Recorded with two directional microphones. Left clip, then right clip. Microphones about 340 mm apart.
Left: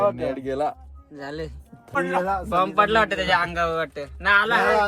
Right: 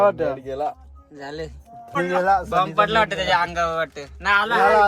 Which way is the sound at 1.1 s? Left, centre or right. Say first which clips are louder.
Right 1 dB; centre.